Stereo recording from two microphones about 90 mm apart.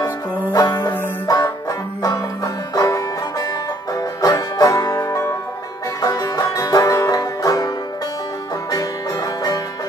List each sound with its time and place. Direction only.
0.8 s banjo: 45° left (ahead or behind)
3.9 s music: 45° left (ahead or behind)